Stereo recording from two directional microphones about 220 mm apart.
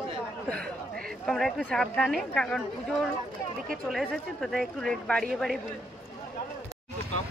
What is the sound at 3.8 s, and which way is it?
Speech, centre (ahead or behind).